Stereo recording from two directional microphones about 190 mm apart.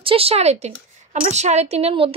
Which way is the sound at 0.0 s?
30° right (ahead or behind).